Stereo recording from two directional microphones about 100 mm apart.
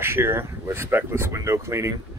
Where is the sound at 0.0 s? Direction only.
25° right (ahead or behind).